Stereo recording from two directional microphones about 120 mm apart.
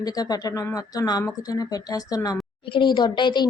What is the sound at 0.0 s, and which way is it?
A woman's voice, 30° left (ahead or behind).